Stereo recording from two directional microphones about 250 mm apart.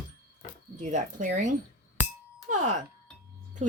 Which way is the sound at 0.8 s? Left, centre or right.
Right.